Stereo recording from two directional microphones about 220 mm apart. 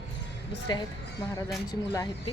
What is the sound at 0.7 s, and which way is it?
Speech, 20° left (ahead or behind).